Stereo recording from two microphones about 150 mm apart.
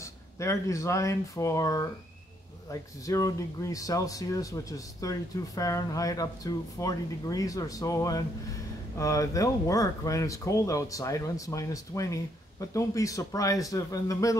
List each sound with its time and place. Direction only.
0.0 s speech: 20° left (ahead or behind)